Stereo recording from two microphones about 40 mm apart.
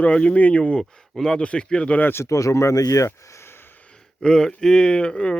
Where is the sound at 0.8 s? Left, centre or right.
Centre.